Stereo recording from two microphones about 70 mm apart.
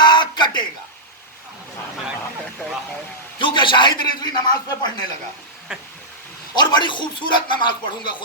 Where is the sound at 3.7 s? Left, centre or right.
Left.